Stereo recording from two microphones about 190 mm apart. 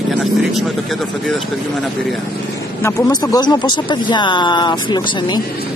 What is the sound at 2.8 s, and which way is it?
Speech, 15° left (ahead or behind).